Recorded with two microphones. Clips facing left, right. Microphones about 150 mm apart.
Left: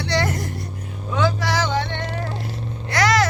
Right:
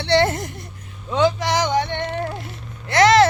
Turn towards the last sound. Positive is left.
turn(degrees=-25)  # may be behind; listen again after turning